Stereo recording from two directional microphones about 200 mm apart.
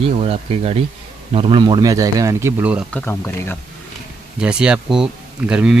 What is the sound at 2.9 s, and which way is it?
Speech, 10° left (ahead or behind).